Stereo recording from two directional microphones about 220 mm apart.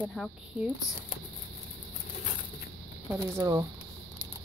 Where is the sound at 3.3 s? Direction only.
15° right (ahead or behind).